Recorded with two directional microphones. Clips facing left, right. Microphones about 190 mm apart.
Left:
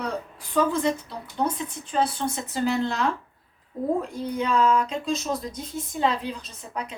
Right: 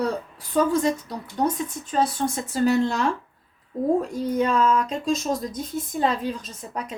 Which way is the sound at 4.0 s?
45° right (ahead or behind).